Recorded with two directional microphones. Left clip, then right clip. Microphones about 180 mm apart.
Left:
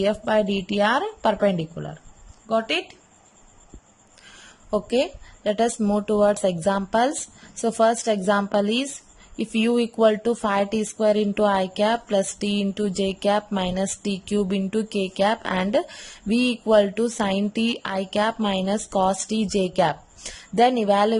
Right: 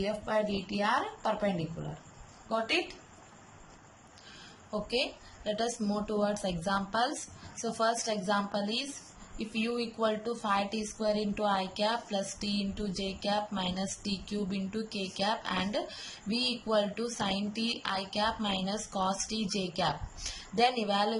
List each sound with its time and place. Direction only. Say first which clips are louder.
0.0 s a woman's voice: left 10 dB; 55° left (ahead or behind)
4.9 s speech: left 7 dB; 45° left (ahead or behind)